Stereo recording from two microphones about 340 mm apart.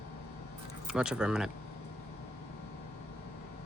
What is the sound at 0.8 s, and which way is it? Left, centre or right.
Speech, centre.